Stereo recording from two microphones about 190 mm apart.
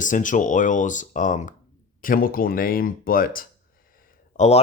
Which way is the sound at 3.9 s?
35° left (ahead or behind).